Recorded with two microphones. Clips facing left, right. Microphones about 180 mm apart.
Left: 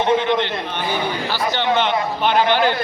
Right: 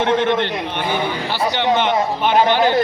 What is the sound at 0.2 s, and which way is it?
Speech, 50° right (ahead or behind).